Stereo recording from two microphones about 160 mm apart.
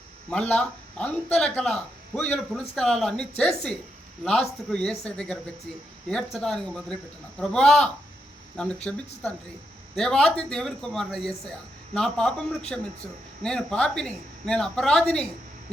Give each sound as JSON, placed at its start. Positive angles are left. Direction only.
{"t": 0.3, "sound": "speech", "side_deg": 5}